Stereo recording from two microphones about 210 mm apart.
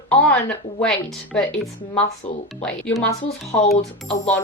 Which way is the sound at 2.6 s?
5° left (ahead or behind).